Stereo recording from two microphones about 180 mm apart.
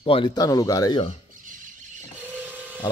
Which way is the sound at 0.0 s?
30° left (ahead or behind).